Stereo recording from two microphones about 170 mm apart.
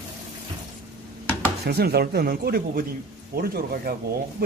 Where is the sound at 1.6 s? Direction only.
70° right (ahead or behind).